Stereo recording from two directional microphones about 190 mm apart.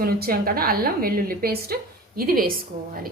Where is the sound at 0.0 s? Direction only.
50° right (ahead or behind).